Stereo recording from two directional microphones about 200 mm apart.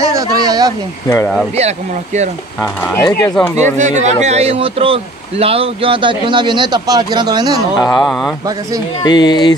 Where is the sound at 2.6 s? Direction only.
10° left (ahead or behind).